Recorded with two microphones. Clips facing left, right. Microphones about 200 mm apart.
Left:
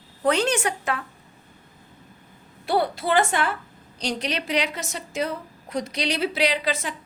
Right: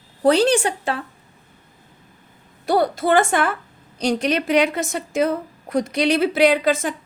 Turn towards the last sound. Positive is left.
turn(degrees=-50)  # may be behind; listen again after turning